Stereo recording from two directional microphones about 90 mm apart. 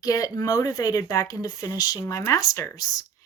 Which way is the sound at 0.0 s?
40° left (ahead or behind).